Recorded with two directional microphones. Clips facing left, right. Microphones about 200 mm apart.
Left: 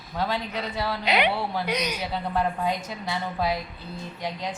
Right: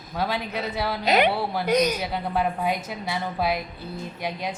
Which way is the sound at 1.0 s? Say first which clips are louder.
Right 4 dB; 45° right (ahead or behind).